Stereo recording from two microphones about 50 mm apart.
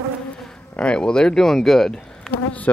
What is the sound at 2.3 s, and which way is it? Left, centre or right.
Bee, centre.